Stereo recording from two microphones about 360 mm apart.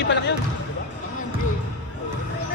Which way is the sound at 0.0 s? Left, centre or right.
Left.